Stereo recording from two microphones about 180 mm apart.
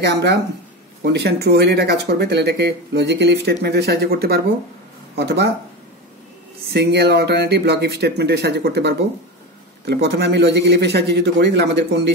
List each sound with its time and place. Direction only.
0.0 s speech: 70° right (ahead or behind)
6.7 s speech: 65° right (ahead or behind)